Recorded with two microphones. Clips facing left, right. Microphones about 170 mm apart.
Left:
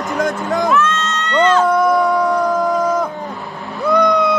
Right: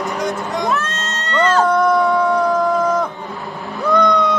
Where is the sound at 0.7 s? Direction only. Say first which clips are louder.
Left 5 dB; 40° right (ahead or behind).